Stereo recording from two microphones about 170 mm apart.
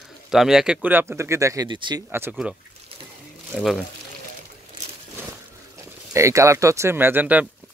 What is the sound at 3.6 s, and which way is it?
Speech, centre (ahead or behind).